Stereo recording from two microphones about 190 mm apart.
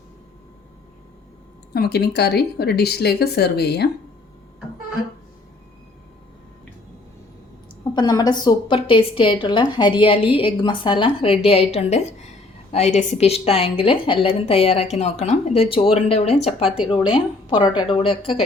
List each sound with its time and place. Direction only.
1.7 s speech: 55° left (ahead or behind)
7.9 s a woman's voice: 20° left (ahead or behind)
16.6 s a woman's voice: centre (ahead or behind)
17.1 s a woman's voice: 25° left (ahead or behind)